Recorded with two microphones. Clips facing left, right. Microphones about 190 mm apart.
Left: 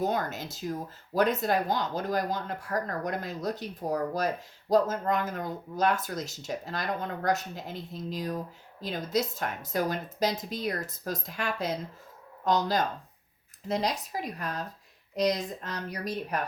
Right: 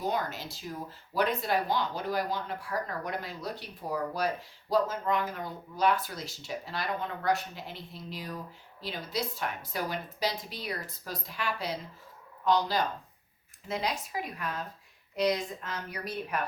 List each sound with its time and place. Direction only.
0.0 s a woman's voice: 50° left (ahead or behind)